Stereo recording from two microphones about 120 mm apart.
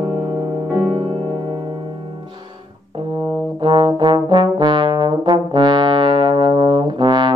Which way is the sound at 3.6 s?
40° right (ahead or behind).